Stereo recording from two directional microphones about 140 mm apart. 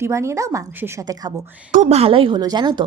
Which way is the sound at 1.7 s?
50° right (ahead or behind).